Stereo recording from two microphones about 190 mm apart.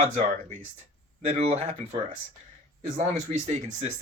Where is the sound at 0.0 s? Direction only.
40° right (ahead or behind).